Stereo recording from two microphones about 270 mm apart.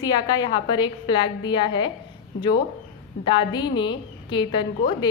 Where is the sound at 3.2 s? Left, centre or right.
Centre.